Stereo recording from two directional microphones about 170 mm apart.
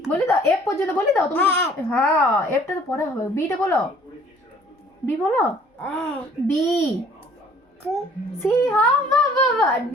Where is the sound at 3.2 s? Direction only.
15° left (ahead or behind).